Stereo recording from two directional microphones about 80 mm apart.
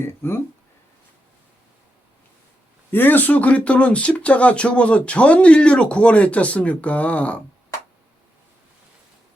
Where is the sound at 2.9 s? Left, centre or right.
Left.